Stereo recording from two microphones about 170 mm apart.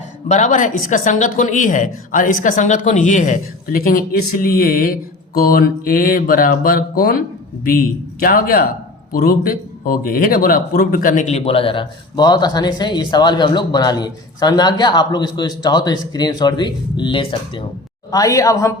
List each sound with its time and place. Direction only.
0.3 s a man's voice: 45° left (ahead or behind); by 18.7 s 20° left (ahead or behind)